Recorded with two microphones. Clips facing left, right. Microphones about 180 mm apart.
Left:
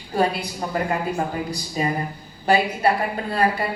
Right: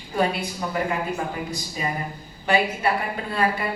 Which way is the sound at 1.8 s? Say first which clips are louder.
Left 5 dB; 40° left (ahead or behind).